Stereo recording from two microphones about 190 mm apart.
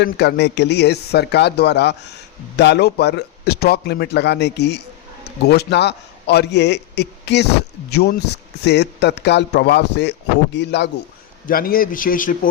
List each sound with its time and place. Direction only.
0.0 s a man's voice: 60° left (ahead or behind)
11.4 s a man's voice: 50° left (ahead or behind)